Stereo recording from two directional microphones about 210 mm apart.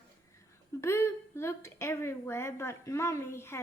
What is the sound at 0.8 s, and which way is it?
A woman's voice, 10° left (ahead or behind).